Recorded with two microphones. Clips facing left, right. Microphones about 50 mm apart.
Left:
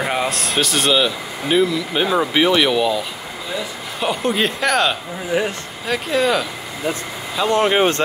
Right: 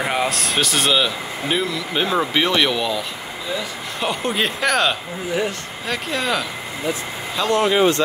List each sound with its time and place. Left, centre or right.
0.0 s speech: centre
5.3 s speech: left
5.9 s speech: centre
7.4 s speech: left